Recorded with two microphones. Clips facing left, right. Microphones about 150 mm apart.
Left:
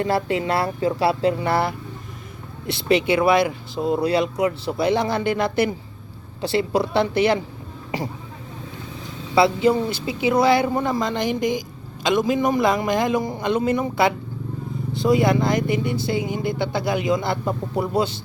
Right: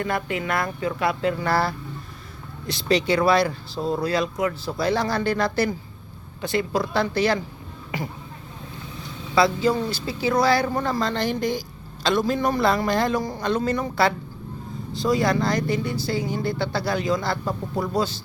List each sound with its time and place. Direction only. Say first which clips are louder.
0.0 s speech: left 5 dB; 30° left (ahead or behind)
9.3 s speech: left 3 dB; 25° left (ahead or behind)